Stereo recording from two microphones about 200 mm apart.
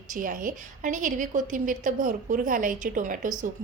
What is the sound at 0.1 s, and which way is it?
A woman's voice, 40° right (ahead or behind).